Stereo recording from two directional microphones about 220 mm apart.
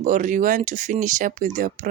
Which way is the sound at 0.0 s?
35° right (ahead or behind).